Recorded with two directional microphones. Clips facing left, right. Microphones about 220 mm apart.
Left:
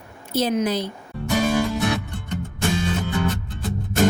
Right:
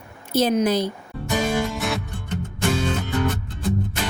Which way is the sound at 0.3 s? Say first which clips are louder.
Right 2 dB; 45° right (ahead or behind).